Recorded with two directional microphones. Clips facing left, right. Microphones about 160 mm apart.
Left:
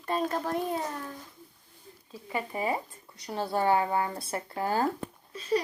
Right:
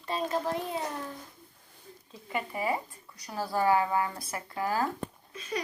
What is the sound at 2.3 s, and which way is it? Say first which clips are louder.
Speech: left 1 dB; 25° left (ahead or behind).